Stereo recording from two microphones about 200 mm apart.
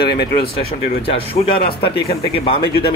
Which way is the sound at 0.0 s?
25° left (ahead or behind).